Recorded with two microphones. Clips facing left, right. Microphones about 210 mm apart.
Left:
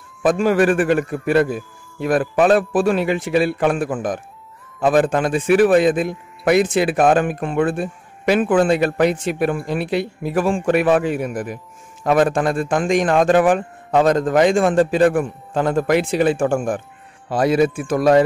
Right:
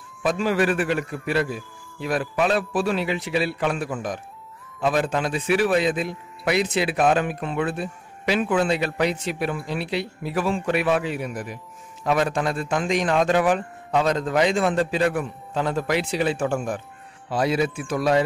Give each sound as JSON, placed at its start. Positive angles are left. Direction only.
{"t": 0.2, "sound": "a man's voice", "side_deg": 50}